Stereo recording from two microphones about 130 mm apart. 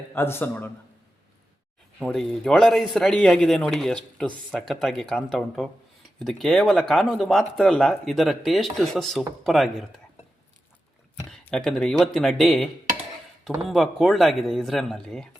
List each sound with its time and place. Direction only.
0.1 s a man's voice: 15° left (ahead or behind)
2.0 s speech: 5° left (ahead or behind)
11.3 s speech: 5° left (ahead or behind)
13.7 s speech: centre (ahead or behind)